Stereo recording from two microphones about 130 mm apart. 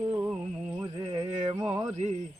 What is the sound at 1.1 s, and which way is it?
Music, 50° right (ahead or behind).